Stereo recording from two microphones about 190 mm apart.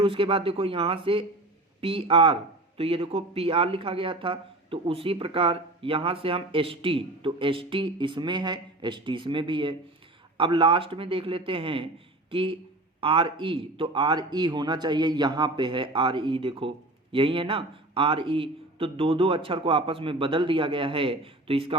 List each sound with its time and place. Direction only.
0.0 s a man's voice: 30° right (ahead or behind)